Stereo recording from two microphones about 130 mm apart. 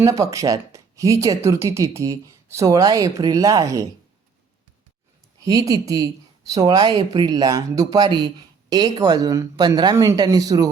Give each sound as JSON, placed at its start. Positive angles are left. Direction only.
{"t": 0.0, "sound": "speech", "side_deg": -25}
{"t": 5.4, "sound": "speech", "side_deg": -25}